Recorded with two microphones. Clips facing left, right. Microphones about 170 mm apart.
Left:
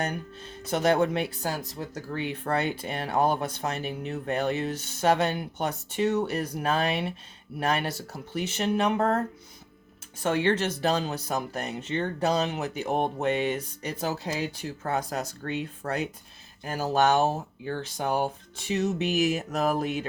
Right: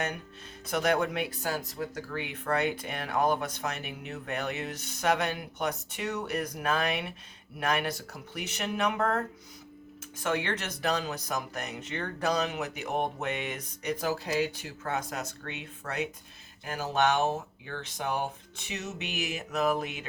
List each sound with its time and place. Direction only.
0.0 s speech: 30° left (ahead or behind)
10.2 s speech: 30° left (ahead or behind)